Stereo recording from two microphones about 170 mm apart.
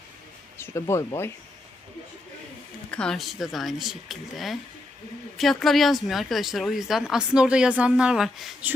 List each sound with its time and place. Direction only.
0.6 s speech: 15° left (ahead or behind)
2.9 s speech: 5° left (ahead or behind)